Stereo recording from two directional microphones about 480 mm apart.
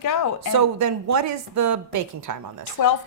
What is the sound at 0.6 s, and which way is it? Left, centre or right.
Speech, right.